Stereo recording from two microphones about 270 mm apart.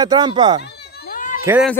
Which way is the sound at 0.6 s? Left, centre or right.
Left.